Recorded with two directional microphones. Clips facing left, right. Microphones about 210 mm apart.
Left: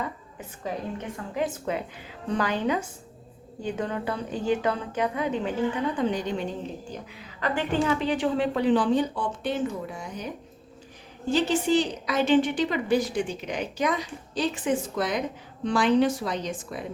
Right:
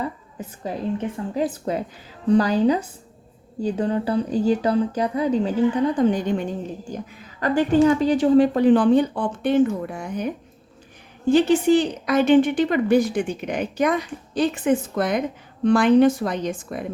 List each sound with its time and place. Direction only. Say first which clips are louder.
1.1 s speech: right 5 dB; 35° right (ahead or behind)
6.0 s a woman's voice: right 6 dB; 50° right (ahead or behind)